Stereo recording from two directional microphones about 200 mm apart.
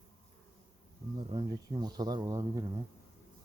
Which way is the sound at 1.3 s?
20° right (ahead or behind).